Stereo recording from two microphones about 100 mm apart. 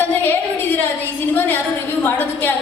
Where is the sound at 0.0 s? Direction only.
20° left (ahead or behind).